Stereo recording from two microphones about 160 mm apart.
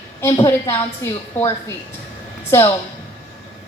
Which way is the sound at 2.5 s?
15° left (ahead or behind).